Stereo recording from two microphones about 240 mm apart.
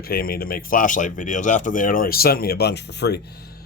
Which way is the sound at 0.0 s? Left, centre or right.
Left.